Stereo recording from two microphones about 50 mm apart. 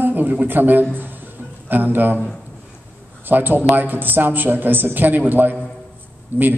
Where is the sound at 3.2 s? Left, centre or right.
Right.